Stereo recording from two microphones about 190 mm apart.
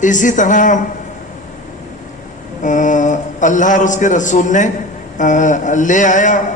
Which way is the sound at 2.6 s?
40° left (ahead or behind).